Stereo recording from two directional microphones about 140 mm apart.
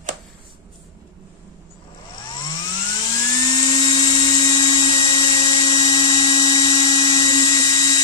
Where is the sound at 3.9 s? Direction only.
35° left (ahead or behind).